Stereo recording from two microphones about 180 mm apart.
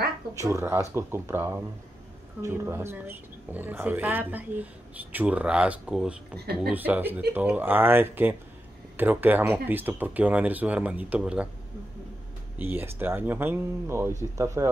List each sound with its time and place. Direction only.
0.4 s speech: 15° right (ahead or behind)
6.3 s speech: 60° right (ahead or behind)
6.7 s speech: 10° right (ahead or behind)
12.5 s speech: 10° right (ahead or behind)